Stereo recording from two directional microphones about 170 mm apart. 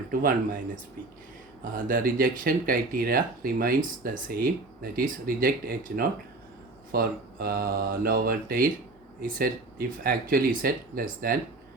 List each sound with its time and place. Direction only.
0.1 s speech: 55° right (ahead or behind)
1.6 s speech: 55° right (ahead or behind)